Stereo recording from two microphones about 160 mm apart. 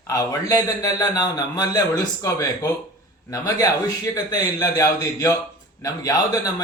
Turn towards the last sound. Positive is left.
turn(degrees=20)  # may be behind; listen again after turning